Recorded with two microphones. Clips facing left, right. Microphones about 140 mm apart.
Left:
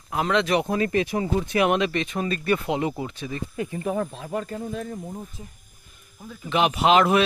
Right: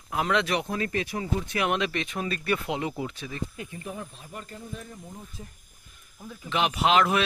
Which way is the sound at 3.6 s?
90° left.